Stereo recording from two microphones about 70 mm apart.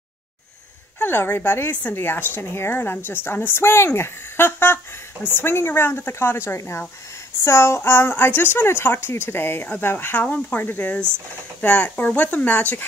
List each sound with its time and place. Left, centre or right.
0.9 s speech: left
1.7 s a woman's voice: left